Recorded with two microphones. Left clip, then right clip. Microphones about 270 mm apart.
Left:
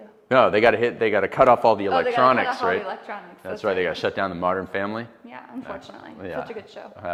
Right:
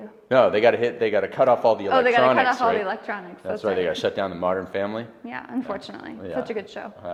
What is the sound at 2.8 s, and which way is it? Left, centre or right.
Speech, right.